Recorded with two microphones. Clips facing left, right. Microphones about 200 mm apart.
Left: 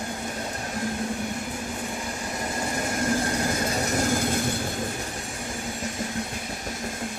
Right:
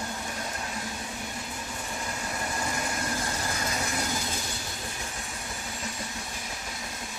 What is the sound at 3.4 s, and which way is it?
Vehicle, 50° left (ahead or behind).